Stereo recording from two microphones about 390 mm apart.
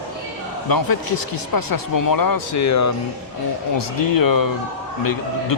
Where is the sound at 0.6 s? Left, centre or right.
Left.